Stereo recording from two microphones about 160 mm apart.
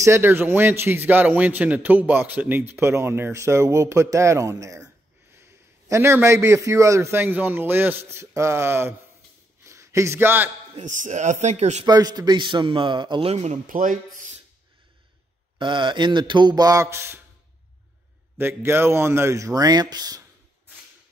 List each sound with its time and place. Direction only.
0.0 s a man's voice: 15° right (ahead or behind)
10.8 s speech: 50° right (ahead or behind)
11.8 s a man's voice: 25° right (ahead or behind); by 13.6 s 40° right (ahead or behind)
13.7 s speech: 55° right (ahead or behind)
15.6 s a man's voice: 30° right (ahead or behind)
18.4 s a man's voice: 15° right (ahead or behind)